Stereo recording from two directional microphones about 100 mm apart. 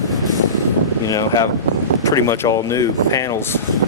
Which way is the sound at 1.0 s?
35° left (ahead or behind).